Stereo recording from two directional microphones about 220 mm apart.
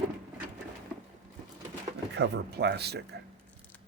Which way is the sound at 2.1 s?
50° right (ahead or behind).